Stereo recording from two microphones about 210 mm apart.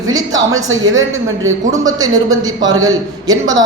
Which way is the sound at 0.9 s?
70° right (ahead or behind).